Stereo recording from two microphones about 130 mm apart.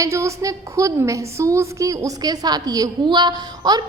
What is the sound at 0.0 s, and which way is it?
A woman's voice, 25° right (ahead or behind).